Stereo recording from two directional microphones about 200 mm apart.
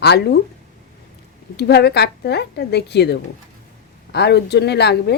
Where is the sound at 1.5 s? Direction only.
55° left (ahead or behind).